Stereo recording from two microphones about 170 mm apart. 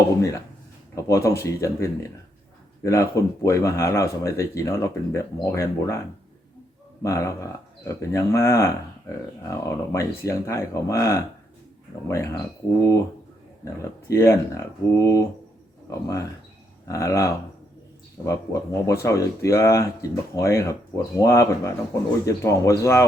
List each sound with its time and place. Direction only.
0.9 s speech: 20° left (ahead or behind)
7.0 s speech: 15° left (ahead or behind)
14.1 s speech: 15° left (ahead or behind)